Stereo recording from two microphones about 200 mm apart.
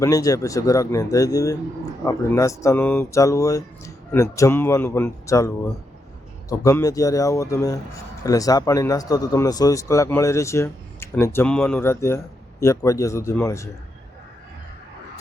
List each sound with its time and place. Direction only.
0.0 s a man's voice: 15° left (ahead or behind)
6.5 s a man's voice: 15° left (ahead or behind)